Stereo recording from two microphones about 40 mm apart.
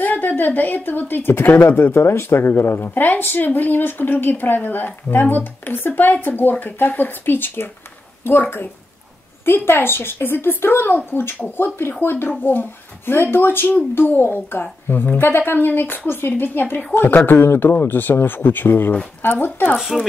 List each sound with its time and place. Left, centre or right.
0.0 s a woman's voice: left
9.7 s speech: left
12.3 s speech: left
16.1 s speech: left
19.8 s speech: centre